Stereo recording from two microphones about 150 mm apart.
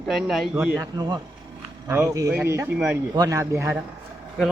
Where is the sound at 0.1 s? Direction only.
Centre (ahead or behind).